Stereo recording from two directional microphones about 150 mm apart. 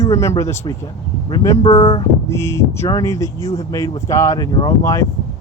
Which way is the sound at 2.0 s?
20° left (ahead or behind).